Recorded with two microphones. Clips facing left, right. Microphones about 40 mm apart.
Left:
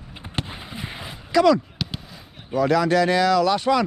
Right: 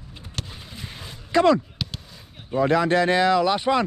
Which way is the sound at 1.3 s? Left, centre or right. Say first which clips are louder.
Left 1 dB; right.